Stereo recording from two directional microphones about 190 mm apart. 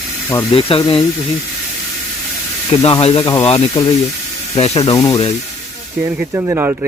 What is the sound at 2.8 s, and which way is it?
Speech, 30° left (ahead or behind).